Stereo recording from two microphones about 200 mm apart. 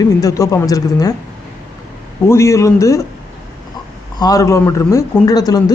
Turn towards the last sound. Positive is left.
turn(degrees=20)  # may be behind; listen again after turning